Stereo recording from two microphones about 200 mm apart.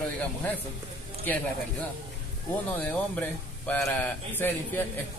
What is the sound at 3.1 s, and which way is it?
Speech, 10° left (ahead or behind).